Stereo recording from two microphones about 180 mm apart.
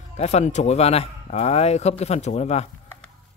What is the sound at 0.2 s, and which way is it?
Speech, 40° left (ahead or behind).